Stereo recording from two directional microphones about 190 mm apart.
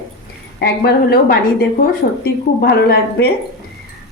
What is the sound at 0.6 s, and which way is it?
A woman's voice, 55° left (ahead or behind).